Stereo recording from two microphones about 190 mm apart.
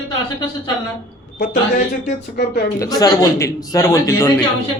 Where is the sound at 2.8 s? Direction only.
20° left (ahead or behind).